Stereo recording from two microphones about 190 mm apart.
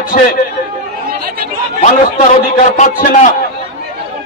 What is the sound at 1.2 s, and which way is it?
Chatter, 50° right (ahead or behind).